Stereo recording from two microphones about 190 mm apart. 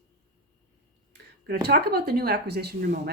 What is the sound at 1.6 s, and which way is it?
Speech, 60° right (ahead or behind).